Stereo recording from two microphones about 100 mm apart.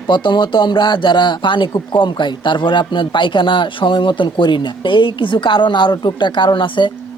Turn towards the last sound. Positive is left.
turn(degrees=55)  # may be behind; listen again after turning